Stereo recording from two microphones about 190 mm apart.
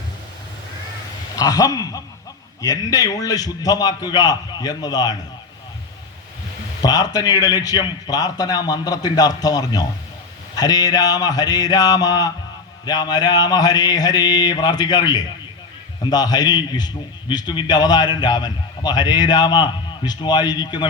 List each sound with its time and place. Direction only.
1.4 s a man's voice: 20° left (ahead or behind)
6.8 s a man's voice: 20° left (ahead or behind)